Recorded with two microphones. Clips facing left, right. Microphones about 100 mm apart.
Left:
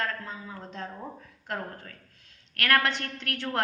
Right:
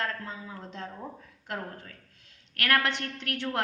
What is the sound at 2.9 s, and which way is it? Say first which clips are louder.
Speech: even; 20° right (ahead or behind).